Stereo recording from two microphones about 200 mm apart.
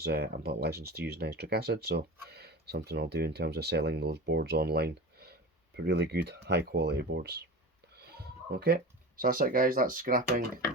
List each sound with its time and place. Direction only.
0.0 s speech: 50° right (ahead or behind)